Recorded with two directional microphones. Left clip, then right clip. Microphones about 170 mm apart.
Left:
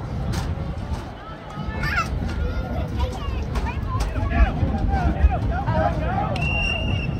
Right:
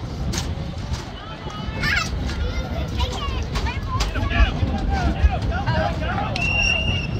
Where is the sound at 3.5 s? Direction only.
60° left (ahead or behind).